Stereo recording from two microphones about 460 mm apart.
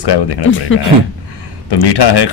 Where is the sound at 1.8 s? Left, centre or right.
Left.